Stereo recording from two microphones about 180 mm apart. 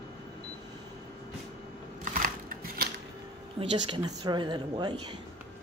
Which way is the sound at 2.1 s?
50° right (ahead or behind).